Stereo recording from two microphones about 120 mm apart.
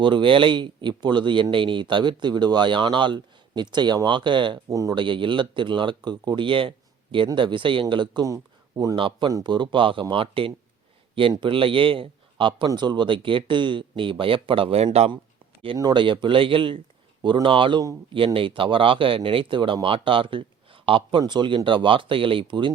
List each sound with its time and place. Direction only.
0.0 s speech: 45° right (ahead or behind)
4.7 s speech: 30° right (ahead or behind)
4.9 s a man's voice: 45° right (ahead or behind)
9.0 s a man's voice: 45° right (ahead or behind)